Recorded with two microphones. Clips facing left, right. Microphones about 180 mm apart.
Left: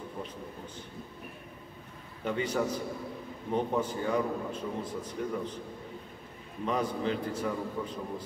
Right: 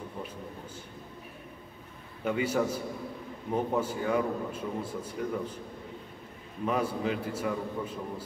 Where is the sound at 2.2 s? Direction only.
5° right (ahead or behind).